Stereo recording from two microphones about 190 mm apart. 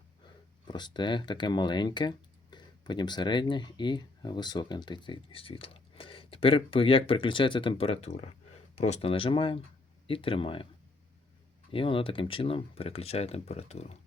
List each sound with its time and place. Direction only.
0.7 s speech: 25° left (ahead or behind)
11.7 s speech: 30° left (ahead or behind)